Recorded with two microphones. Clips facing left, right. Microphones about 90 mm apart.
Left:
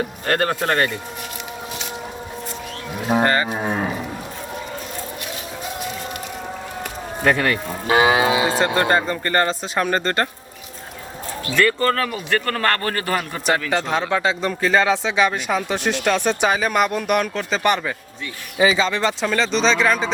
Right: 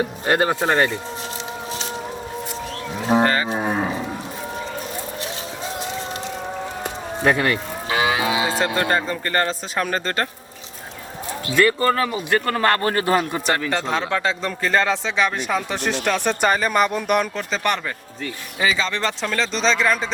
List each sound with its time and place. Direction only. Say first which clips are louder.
0.3 s a man's voice: right 1 dB; 15° right (ahead or behind)
3.1 s speech: even; 5° left (ahead or behind)
7.3 s a man's voice: even; 10° right (ahead or behind)
7.9 s moo: left 5 dB; 40° left (ahead or behind)
8.5 s speech: left 2 dB; centre (ahead or behind)
11.5 s a man's voice: right 1 dB; 15° right (ahead or behind)
13.5 s speech: left 3 dB; 5° left (ahead or behind)